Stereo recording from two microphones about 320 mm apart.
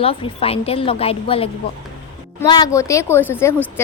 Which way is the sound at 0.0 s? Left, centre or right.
Centre.